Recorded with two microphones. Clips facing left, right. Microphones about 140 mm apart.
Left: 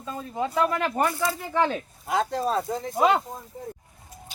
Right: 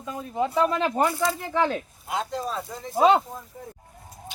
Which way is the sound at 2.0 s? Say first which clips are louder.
Left 5 dB; 40° left (ahead or behind).